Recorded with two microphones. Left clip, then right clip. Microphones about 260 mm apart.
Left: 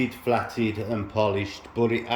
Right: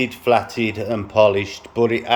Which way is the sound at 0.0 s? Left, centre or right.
Centre.